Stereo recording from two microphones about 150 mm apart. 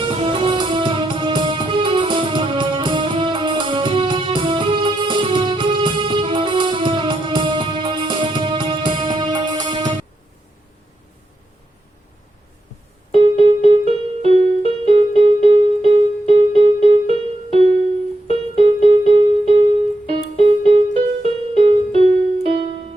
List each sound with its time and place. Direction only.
0.0 s music: 35° right (ahead or behind)
13.1 s music: 40° right (ahead or behind)
18.3 s keyboard: 40° right (ahead or behind)
20.1 s music: 45° right (ahead or behind)